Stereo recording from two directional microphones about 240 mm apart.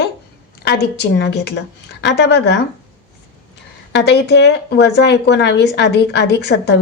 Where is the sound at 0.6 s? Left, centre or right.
Left.